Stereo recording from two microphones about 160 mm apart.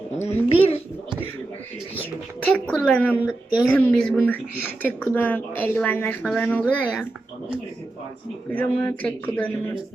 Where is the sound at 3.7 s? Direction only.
10° left (ahead or behind).